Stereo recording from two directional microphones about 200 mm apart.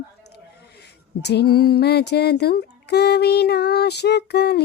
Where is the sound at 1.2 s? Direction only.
55° left (ahead or behind).